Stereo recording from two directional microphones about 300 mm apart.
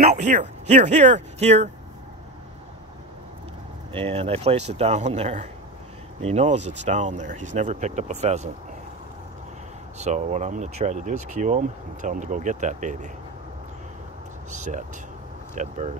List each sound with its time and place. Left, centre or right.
0.0 s speech: right
3.9 s speech: centre
9.9 s speech: right
14.6 s speech: right